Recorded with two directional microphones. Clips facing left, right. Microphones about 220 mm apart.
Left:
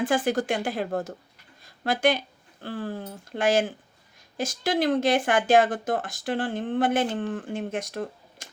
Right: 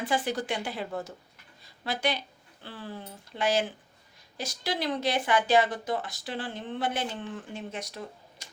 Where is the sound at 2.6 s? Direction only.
50° left (ahead or behind).